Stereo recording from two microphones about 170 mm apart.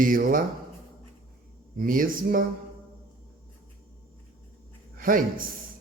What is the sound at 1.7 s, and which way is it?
Speech, 55° right (ahead or behind).